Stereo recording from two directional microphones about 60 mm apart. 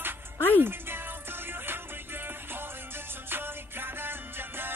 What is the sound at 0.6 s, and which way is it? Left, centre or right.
Music, right.